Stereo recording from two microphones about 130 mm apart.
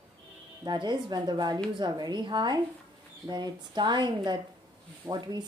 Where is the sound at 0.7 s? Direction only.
35° right (ahead or behind).